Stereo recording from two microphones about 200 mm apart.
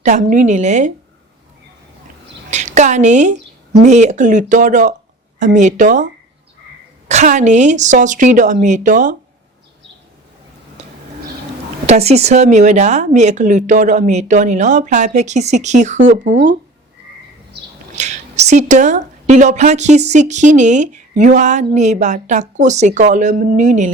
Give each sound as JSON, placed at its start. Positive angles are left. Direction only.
{"t": 0.0, "sound": "a woman's voice", "side_deg": -40}
{"t": 2.5, "sound": "a woman's voice", "side_deg": -35}
{"t": 7.1, "sound": "a woman's voice", "side_deg": -35}
{"t": 11.9, "sound": "a woman's voice", "side_deg": -30}
{"t": 16.3, "sound": "speech", "side_deg": -60}
{"t": 17.9, "sound": "a woman's voice", "side_deg": -35}